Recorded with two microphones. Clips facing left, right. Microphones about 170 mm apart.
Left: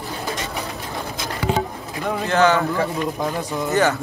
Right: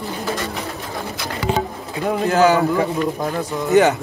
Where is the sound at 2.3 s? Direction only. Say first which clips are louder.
Right 2 dB; 5° right (ahead or behind).